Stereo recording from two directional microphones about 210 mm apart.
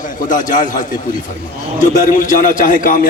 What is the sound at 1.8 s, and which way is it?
A man's voice, 35° left (ahead or behind).